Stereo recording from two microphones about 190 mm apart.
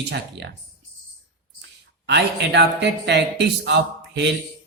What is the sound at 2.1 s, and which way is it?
A man's voice, 65° right (ahead or behind).